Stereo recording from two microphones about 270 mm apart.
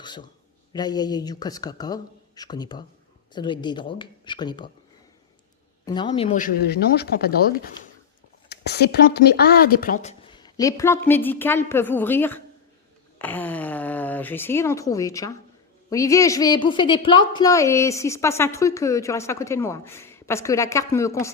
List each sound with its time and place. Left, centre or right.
0.0 s a sound: centre
0.7 s speech: centre
5.8 s a woman's voice: centre
6.3 s speech: left; by 21.3 s centre